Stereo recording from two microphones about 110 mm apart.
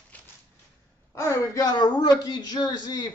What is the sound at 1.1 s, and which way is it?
A man's voice, 25° left (ahead or behind).